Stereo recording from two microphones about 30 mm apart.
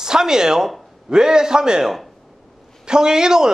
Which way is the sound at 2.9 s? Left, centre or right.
Right.